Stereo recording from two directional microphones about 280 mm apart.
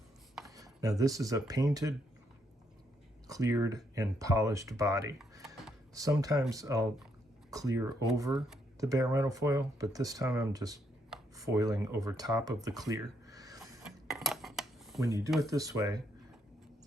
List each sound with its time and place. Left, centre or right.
0.5 s speech: centre
3.2 s speech: centre
5.3 s computer keyboard: centre
5.9 s speech: centre
8.3 s speech: centre
8.8 s speech: centre
12.9 s a sound: centre
13.8 s dishes: centre
15.4 s speech: centre